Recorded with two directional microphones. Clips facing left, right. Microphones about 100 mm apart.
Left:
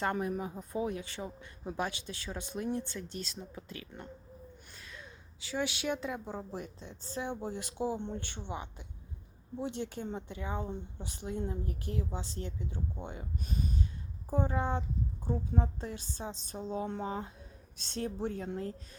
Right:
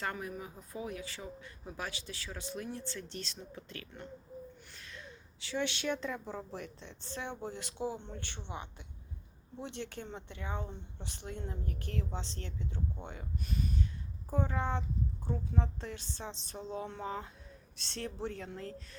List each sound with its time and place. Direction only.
0.0 s speech: 30° left (ahead or behind)
5.5 s speech: 10° left (ahead or behind)
6.7 s a woman's voice: 40° left (ahead or behind)
7.2 s a woman's voice: 10° left (ahead or behind)